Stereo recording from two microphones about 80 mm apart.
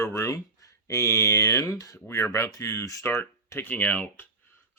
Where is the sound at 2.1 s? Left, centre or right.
Left.